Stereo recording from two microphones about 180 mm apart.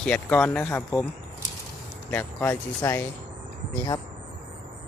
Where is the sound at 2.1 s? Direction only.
10° left (ahead or behind).